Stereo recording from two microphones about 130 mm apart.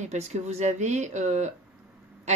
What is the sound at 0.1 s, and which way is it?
Speech, 60° right (ahead or behind).